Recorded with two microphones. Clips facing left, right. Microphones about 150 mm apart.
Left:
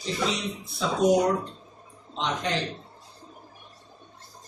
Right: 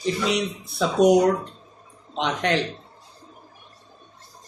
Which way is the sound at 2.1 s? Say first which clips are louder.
Right 5 dB; 75° right (ahead or behind).